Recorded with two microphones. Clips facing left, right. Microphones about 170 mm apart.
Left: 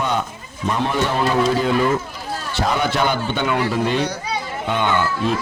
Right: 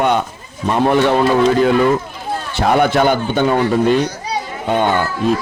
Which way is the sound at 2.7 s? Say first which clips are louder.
Right 7 dB; 55° right (ahead or behind).